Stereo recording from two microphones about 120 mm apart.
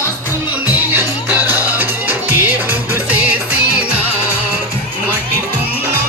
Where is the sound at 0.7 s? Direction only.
15° right (ahead or behind).